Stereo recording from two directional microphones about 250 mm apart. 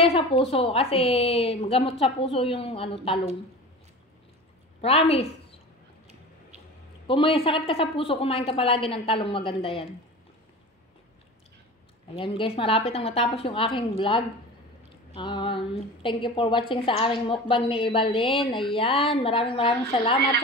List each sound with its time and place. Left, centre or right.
0.0 s a woman's voice: left
4.8 s a woman's voice: left
7.1 s a woman's voice: left
12.2 s a woman's voice: left